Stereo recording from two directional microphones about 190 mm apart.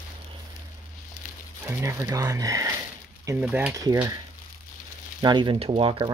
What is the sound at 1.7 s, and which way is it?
Speech, 15° right (ahead or behind).